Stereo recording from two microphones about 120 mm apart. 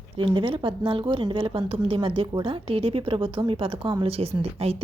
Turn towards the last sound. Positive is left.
turn(degrees=-55)  # may be behind; listen again after turning